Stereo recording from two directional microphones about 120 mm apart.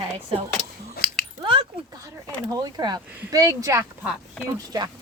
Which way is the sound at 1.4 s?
45° right (ahead or behind).